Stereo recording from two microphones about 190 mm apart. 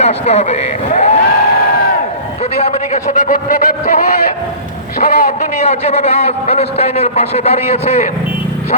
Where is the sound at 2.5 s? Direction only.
35° left (ahead or behind).